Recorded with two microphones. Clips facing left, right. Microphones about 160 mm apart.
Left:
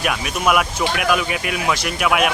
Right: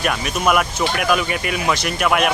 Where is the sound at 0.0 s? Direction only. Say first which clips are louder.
Right 1 dB; 5° left (ahead or behind).